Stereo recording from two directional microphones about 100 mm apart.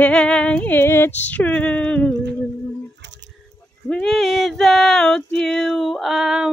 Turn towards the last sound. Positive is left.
turn(degrees=-5)  # may be behind; listen again after turning